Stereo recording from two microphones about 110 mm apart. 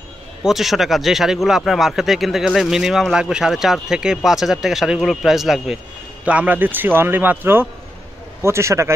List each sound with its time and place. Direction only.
0.4 s a man's voice: 5° right (ahead or behind); by 8.9 s 25° right (ahead or behind)